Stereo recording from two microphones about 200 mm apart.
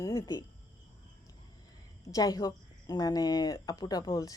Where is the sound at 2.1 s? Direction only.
20° left (ahead or behind).